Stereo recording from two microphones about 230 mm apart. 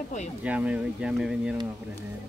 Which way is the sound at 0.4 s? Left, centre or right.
Centre.